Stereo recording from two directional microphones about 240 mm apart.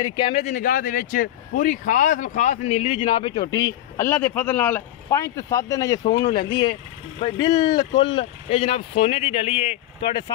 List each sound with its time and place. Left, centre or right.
0.0 s speech: centre
6.0 s speech: left
7.2 s speech: left